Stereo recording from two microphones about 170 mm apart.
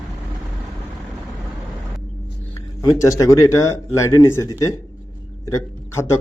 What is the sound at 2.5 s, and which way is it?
Speech, 20° left (ahead or behind).